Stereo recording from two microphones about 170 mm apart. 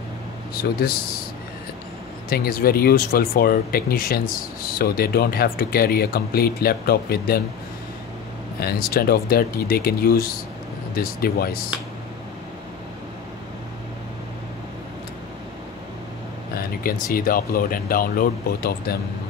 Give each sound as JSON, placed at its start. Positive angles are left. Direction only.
{"t": 2.2, "sound": "speech", "side_deg": 60}
{"t": 8.5, "sound": "speech", "side_deg": 60}
{"t": 16.5, "sound": "speech", "side_deg": 60}